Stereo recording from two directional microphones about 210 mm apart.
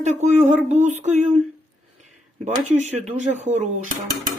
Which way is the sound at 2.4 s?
35° right (ahead or behind).